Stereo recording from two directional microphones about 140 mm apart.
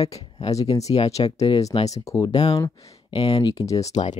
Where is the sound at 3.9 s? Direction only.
55° left (ahead or behind).